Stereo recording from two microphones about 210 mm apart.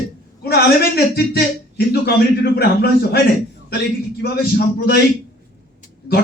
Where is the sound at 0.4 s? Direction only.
50° left (ahead or behind).